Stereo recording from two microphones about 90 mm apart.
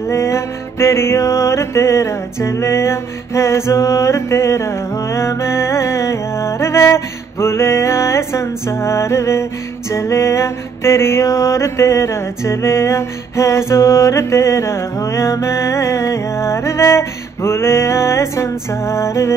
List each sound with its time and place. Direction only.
0.1 s music: 30° left (ahead or behind)